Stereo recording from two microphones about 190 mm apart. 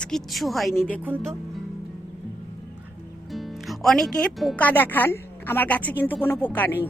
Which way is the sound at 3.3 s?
Centre (ahead or behind).